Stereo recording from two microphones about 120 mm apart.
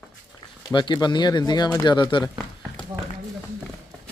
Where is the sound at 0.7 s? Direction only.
40° left (ahead or behind).